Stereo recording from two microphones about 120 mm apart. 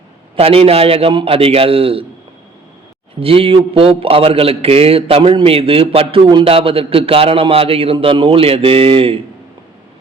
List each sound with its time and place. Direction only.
0.3 s a man's voice: 55° right (ahead or behind)
3.2 s a man's voice: 50° right (ahead or behind)